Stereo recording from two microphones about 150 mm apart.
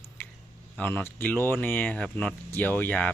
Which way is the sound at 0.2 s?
15° left (ahead or behind).